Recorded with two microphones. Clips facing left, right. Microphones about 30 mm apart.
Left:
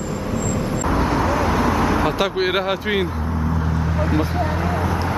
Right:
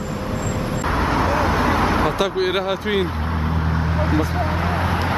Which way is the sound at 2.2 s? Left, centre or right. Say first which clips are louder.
Even; centre.